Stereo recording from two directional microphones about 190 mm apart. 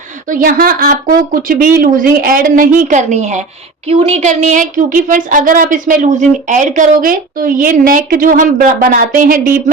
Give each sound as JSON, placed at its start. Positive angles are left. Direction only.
{"t": 0.3, "sound": "a woman's voice", "side_deg": -45}